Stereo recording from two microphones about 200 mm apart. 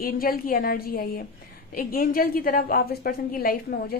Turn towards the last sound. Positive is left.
turn(degrees=50)  # may be behind; listen again after turning